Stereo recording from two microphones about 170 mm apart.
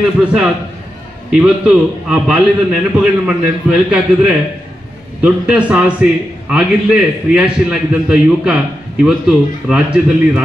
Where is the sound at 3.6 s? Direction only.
5° right (ahead or behind).